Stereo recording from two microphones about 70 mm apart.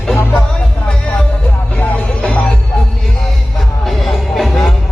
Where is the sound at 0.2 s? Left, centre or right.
Left.